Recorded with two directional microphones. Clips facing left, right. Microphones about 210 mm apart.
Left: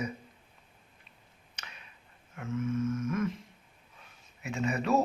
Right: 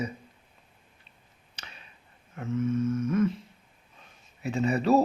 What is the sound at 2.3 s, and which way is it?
Speech, 35° right (ahead or behind).